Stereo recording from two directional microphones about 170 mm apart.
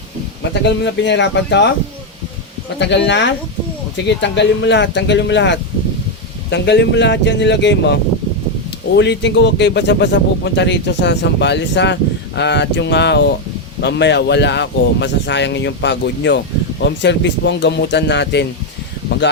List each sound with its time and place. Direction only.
0.6 s speech: 90° left
2.7 s speech: 90° left
9.0 s speech: 90° left